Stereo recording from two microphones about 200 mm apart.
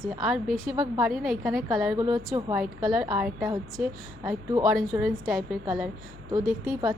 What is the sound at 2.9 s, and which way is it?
A woman's voice, 5° right (ahead or behind).